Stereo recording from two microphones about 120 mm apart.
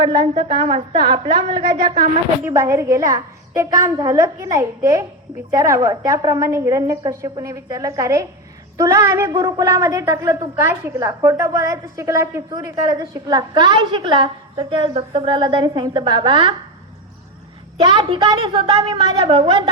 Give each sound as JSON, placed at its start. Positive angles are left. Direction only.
{"t": 0.0, "sound": "a woman's voice", "side_deg": -40}
{"t": 2.5, "sound": "a woman's voice", "side_deg": -25}
{"t": 17.7, "sound": "a woman's voice", "side_deg": -40}